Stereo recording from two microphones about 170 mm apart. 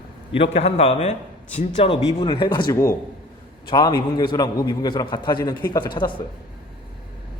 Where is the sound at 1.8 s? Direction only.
30° left (ahead or behind).